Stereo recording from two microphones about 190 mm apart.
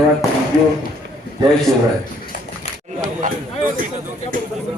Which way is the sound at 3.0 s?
45° right (ahead or behind).